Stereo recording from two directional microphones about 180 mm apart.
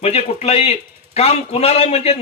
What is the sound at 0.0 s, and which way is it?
A man's voice, 35° left (ahead or behind).